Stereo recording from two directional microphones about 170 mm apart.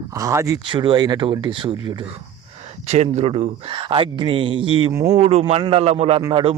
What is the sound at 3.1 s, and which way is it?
Speech, 40° right (ahead or behind).